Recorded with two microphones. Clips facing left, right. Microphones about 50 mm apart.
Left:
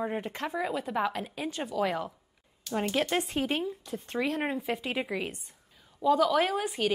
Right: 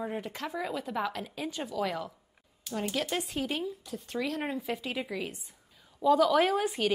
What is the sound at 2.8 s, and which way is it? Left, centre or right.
Speech, left.